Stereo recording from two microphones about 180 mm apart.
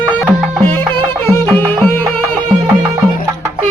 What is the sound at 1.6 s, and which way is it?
Music, 10° left (ahead or behind).